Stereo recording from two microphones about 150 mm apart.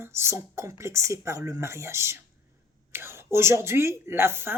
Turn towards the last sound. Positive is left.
turn(degrees=-15)  # may be behind; listen again after turning